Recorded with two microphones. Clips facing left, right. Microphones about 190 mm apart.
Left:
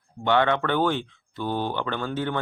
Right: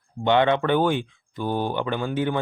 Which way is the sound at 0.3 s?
20° right (ahead or behind).